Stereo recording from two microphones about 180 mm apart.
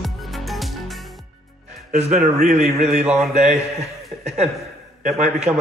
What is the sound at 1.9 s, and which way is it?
A man's voice, 45° right (ahead or behind).